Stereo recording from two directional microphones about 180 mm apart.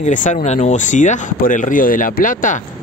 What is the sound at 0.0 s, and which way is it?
Speech, 45° left (ahead or behind).